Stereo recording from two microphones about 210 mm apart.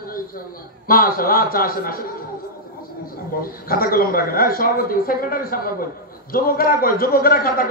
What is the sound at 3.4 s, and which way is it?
A man's voice, 45° left (ahead or behind).